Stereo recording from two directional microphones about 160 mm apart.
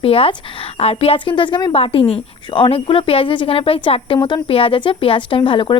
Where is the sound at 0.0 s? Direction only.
35° left (ahead or behind).